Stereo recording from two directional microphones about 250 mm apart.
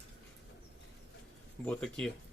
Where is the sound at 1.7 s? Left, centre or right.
Centre.